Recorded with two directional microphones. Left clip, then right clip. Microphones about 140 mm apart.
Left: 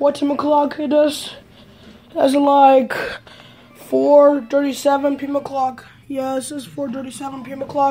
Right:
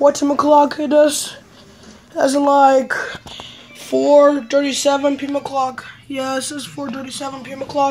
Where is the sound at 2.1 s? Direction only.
30° left (ahead or behind).